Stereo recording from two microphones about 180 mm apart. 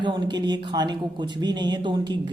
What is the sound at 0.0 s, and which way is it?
A woman's voice, 25° right (ahead or behind).